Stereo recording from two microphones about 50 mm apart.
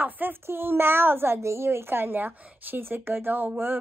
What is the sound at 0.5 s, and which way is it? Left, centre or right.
A woman's voice, right.